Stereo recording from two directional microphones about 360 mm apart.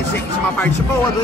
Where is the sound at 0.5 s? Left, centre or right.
Centre.